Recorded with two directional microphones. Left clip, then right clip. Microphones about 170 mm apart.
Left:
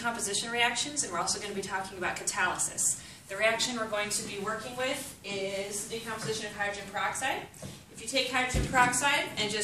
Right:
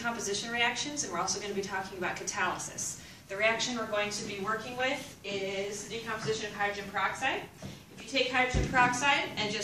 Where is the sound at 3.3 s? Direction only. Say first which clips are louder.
Left 1 dB; centre (ahead or behind).